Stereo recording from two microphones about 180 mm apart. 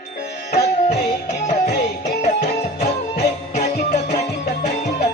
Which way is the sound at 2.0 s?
40° left (ahead or behind).